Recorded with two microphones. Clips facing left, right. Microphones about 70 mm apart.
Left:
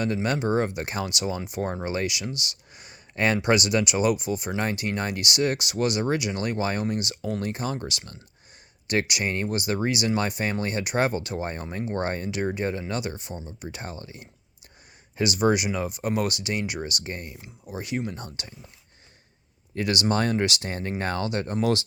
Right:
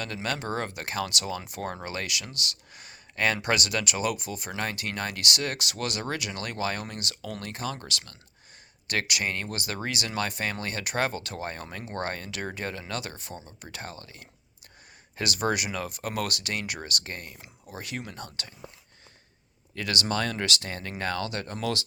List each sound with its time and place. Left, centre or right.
0.0 s speech: centre
19.7 s speech: centre